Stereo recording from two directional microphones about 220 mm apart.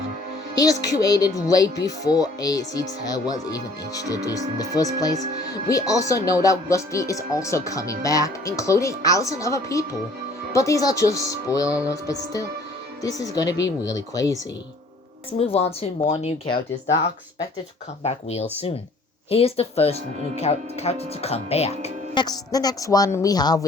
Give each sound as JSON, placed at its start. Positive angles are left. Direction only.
{"t": 0.5, "sound": "speech", "side_deg": 15}
{"t": 15.3, "sound": "speech", "side_deg": 25}
{"t": 18.0, "sound": "speech", "side_deg": 30}